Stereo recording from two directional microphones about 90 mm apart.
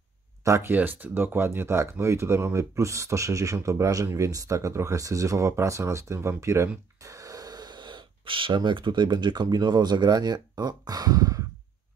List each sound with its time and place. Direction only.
0.4 s speech: 30° right (ahead or behind)